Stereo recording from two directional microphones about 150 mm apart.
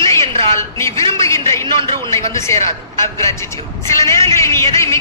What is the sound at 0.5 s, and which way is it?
Speech, 20° left (ahead or behind).